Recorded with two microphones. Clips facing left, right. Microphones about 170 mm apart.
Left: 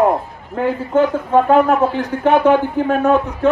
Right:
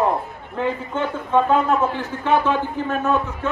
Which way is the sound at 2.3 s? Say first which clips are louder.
Left 7 dB; 60° left (ahead or behind).